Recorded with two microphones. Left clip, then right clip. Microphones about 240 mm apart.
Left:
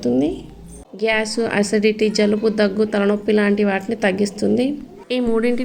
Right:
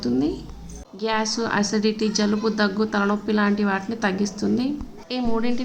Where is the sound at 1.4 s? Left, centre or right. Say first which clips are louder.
Left 5 dB; centre.